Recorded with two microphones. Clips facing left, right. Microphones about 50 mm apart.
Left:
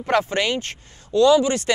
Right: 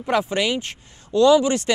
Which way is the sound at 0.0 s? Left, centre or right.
Left.